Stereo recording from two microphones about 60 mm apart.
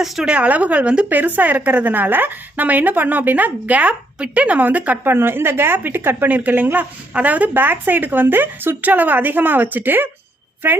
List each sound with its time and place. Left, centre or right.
0.3 s a woman's voice: right